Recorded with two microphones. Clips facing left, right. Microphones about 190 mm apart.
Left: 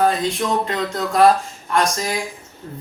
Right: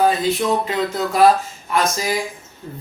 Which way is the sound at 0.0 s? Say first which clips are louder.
Right 2 dB; 5° right (ahead or behind).